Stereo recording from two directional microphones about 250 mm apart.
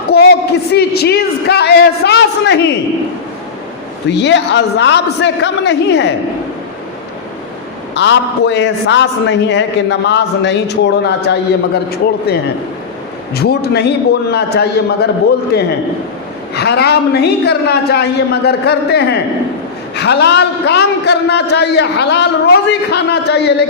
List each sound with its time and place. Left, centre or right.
0.1 s a sound: left
4.1 s a man's voice: left
7.9 s a man's voice: left